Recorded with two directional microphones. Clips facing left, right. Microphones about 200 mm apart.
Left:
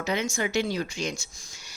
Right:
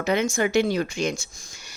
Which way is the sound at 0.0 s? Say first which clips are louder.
Right 5 dB; 55° right (ahead or behind).